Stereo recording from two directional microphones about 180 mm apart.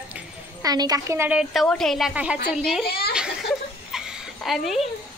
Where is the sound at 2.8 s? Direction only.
60° left (ahead or behind).